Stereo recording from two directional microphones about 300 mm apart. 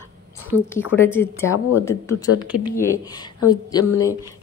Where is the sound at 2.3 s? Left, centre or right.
Left.